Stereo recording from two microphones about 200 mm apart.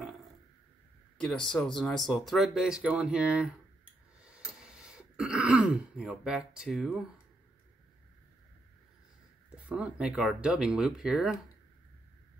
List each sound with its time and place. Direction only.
1.2 s speech: 5° left (ahead or behind)
4.2 s throat clearing: 5° right (ahead or behind)
9.7 s speech: 5° right (ahead or behind)